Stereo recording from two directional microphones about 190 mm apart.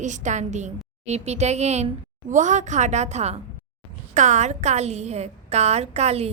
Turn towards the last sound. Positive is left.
turn(degrees=-35)  # may be behind; listen again after turning